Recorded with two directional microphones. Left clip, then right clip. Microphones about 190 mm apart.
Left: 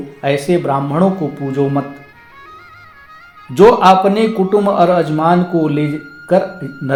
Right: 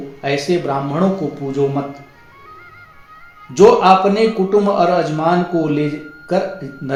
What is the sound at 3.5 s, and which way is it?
Mantra, 25° left (ahead or behind).